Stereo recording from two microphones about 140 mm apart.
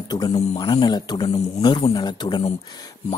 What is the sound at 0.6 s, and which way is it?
Speech, 35° left (ahead or behind).